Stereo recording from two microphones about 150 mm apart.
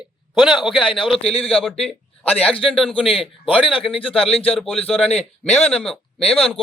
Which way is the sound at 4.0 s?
40° left (ahead or behind).